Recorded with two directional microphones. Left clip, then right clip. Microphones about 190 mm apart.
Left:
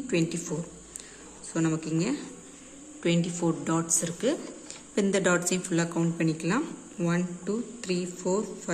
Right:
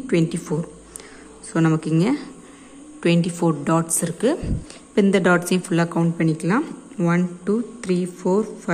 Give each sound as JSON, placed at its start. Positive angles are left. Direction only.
{"t": 0.0, "sound": "speech", "side_deg": -20}